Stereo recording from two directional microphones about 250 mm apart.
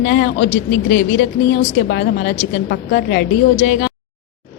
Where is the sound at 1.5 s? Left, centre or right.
Left.